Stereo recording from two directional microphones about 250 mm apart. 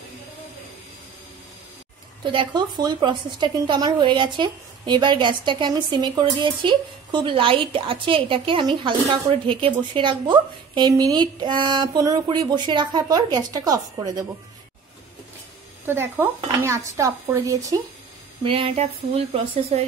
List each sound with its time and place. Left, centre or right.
2.2 s a woman's voice: centre
15.9 s a woman's voice: centre; by 19.8 s right